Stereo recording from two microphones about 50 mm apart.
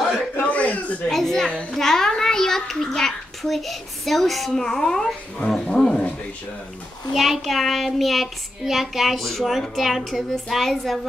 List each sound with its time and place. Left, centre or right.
0.5 s a sound: left
1.0 s a child's voice: centre
7.2 s child singing: centre